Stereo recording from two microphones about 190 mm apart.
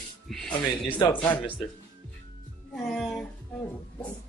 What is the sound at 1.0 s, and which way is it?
Speech, 20° left (ahead or behind).